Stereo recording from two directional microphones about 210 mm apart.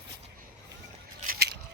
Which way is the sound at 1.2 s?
45° right (ahead or behind).